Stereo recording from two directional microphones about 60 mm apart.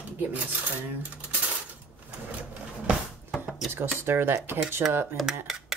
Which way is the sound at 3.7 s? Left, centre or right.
Right.